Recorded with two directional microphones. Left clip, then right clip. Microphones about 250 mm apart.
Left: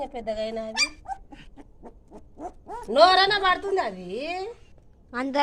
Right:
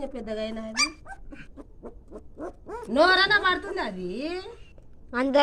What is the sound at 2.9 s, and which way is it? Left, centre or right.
A woman's voice, left.